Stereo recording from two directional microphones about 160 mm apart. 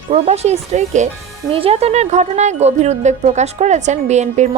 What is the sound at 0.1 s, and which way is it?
A woman's voice, 40° right (ahead or behind).